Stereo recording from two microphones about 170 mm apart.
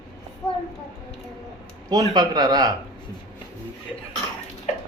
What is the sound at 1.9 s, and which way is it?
Speech, 25° right (ahead or behind).